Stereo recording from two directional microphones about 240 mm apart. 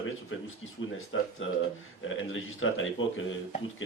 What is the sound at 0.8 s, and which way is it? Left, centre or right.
A man's voice, left.